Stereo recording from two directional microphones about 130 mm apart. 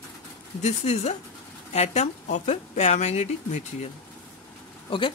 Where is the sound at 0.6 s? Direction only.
60° left (ahead or behind).